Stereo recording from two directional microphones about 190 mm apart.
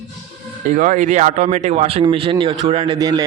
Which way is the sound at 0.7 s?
40° right (ahead or behind).